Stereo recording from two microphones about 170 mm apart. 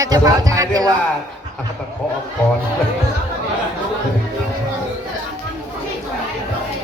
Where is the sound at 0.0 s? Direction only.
20° right (ahead or behind).